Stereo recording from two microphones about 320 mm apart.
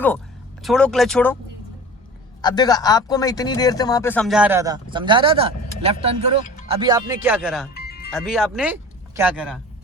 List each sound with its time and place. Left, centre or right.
0.6 s speech: centre
2.4 s speech: centre
7.7 s music: left
8.1 s speech: centre